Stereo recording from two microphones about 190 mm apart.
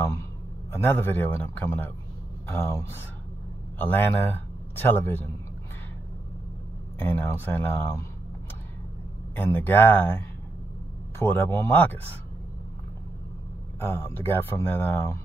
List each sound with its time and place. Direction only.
0.0 s a man's voice: 15° left (ahead or behind)
7.0 s speech: 10° left (ahead or behind)
9.3 s speech: 10° left (ahead or behind)
13.7 s speech: 15° left (ahead or behind)